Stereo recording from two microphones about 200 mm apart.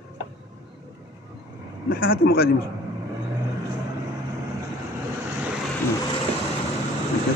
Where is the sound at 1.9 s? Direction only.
45° left (ahead or behind).